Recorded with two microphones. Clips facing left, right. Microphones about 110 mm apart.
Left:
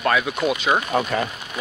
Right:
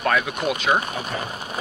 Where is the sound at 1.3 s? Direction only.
35° right (ahead or behind).